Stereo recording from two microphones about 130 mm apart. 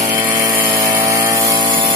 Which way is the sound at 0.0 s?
25° right (ahead or behind).